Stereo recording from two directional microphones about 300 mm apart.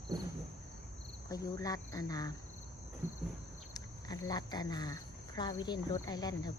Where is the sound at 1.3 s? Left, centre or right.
Centre.